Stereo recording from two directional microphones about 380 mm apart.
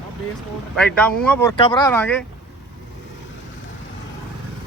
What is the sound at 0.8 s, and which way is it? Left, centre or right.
Speech, centre.